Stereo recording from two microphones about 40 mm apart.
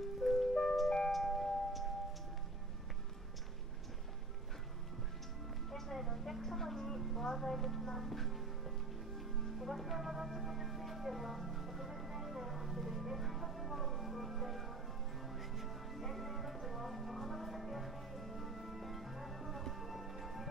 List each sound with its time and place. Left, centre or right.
0.2 s music: centre
5.7 s a sound: centre
7.8 s music: centre